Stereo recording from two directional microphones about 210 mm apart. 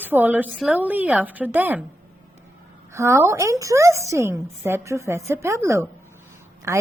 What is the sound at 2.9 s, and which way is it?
A woman's voice, 15° right (ahead or behind).